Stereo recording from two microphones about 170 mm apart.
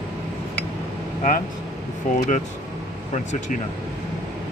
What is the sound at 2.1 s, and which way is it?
Speech, 55° left (ahead or behind).